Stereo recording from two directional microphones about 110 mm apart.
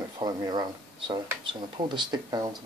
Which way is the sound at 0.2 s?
40° right (ahead or behind).